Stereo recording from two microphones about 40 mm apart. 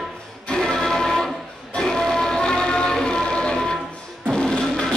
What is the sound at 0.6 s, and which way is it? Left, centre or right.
Music, centre.